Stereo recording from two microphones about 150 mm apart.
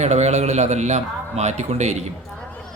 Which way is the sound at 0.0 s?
50° right (ahead or behind).